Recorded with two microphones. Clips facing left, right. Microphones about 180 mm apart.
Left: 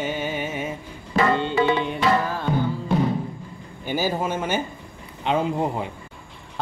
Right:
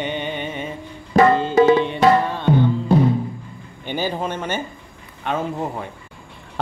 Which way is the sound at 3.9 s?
5° left (ahead or behind).